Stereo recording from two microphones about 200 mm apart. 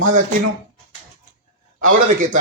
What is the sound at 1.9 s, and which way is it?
Speech, 40° right (ahead or behind).